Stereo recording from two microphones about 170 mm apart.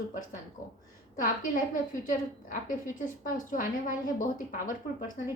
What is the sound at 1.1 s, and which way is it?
A woman's voice, 50° left (ahead or behind).